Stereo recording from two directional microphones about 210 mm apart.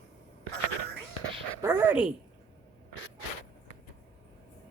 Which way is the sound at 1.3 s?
25° right (ahead or behind).